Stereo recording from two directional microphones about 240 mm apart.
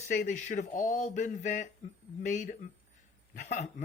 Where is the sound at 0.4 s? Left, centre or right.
Left.